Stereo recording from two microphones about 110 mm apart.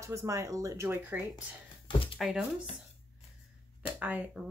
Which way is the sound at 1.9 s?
50° left (ahead or behind).